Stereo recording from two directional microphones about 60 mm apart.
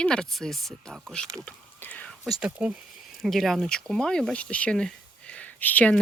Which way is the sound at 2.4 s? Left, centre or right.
Centre.